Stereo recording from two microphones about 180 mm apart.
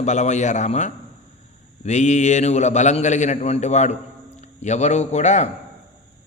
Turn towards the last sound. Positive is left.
turn(degrees=40)  # may be behind; listen again after turning